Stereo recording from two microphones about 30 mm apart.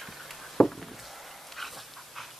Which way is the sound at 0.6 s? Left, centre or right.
Left.